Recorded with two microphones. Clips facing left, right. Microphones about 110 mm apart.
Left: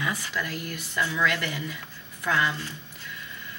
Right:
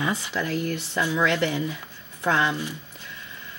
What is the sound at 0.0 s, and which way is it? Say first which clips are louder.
Speech: right 4 dB; 25° right (ahead or behind).